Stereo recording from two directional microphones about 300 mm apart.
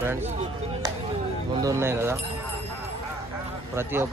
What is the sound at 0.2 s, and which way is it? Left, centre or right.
Speech, right.